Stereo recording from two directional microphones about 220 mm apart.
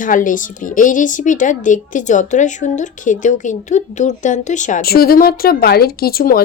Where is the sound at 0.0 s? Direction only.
35° left (ahead or behind).